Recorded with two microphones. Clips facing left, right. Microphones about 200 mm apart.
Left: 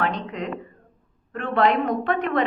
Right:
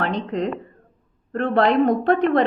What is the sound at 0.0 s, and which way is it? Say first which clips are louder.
A woman's voice: right 4 dB; 40° right (ahead or behind).